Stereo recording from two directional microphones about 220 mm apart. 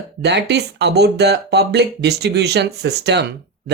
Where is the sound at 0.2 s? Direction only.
50° right (ahead or behind).